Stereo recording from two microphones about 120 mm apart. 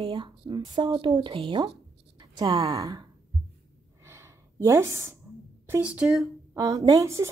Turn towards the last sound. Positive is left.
turn(degrees=-25)  # may be behind; listen again after turning